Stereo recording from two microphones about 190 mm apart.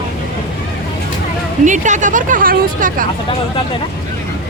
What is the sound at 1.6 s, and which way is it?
Speech, 40° right (ahead or behind).